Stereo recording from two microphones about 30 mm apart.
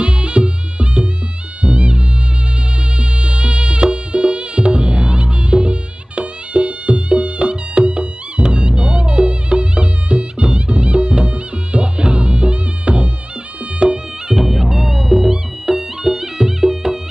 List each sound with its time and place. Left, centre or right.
0.0 s music: right
14.3 s music: centre